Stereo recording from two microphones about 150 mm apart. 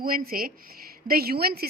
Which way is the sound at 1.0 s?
90° right.